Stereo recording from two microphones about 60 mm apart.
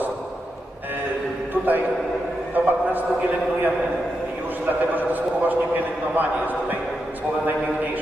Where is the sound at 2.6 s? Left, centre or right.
Right.